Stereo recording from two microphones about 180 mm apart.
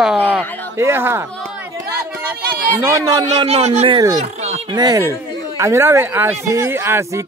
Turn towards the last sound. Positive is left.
turn(degrees=-15)  # may be behind; listen again after turning